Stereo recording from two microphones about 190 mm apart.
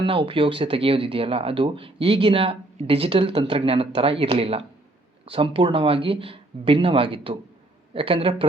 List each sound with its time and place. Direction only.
0.0 s speech: 30° right (ahead or behind)